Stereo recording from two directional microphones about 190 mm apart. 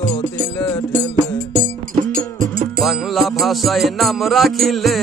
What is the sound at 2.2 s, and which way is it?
Music, 45° right (ahead or behind).